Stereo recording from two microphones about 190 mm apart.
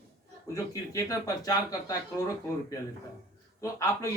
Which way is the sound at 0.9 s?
20° left (ahead or behind).